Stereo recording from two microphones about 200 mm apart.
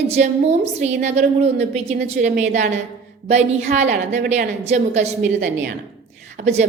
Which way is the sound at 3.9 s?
60° right (ahead or behind).